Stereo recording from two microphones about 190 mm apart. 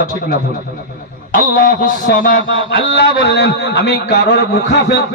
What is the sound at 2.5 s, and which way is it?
A man's voice, 75° left (ahead or behind).